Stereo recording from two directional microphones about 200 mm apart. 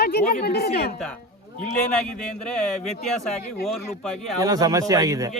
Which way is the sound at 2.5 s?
5° left (ahead or behind).